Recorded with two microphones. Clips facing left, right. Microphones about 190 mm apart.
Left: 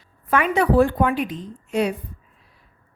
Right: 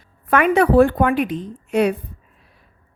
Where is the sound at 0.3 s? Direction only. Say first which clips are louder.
Right 4 dB; 60° right (ahead or behind).